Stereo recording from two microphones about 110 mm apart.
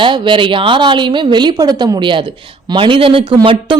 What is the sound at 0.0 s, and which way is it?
Speech, 45° right (ahead or behind).